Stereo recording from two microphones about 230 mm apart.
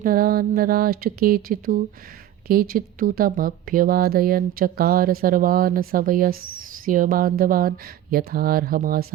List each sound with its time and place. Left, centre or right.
0.0 s speech: right